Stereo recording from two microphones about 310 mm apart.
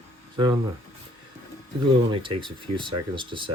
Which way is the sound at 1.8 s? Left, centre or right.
Centre.